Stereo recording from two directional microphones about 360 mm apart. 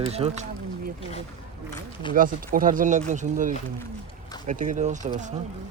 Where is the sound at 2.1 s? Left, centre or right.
Right.